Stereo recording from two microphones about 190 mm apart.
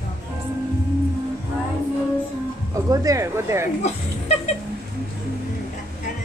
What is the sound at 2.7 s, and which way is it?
Speech, 15° right (ahead or behind).